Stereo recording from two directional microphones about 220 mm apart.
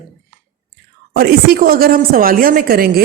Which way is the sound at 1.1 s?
45° right (ahead or behind).